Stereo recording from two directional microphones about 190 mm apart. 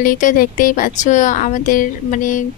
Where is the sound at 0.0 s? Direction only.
45° left (ahead or behind).